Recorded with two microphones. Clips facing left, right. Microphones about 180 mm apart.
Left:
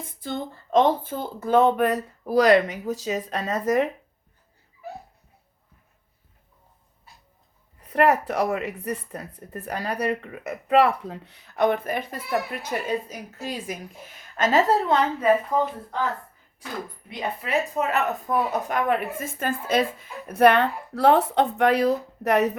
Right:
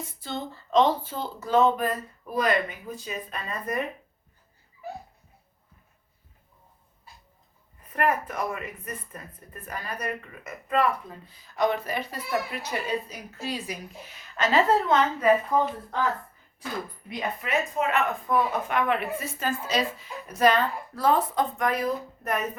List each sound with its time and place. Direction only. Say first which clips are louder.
0.0 s speech: left 3 dB; 50° left (ahead or behind); by 3.8 s 90° left
7.8 s a woman's voice: left 6 dB; 75° left (ahead or behind); by 15.3 s 35° left (ahead or behind)
17.1 s speech: left 2 dB; 30° left (ahead or behind); by 22.5 s 75° left (ahead or behind)